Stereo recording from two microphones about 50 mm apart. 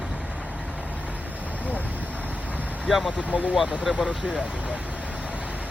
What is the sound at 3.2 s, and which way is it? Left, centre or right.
Speech, left.